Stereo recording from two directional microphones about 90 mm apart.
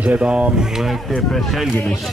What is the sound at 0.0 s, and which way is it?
Speech, 15° right (ahead or behind).